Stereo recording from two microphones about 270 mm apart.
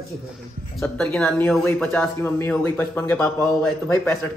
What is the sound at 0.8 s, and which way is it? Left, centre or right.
Speech, centre.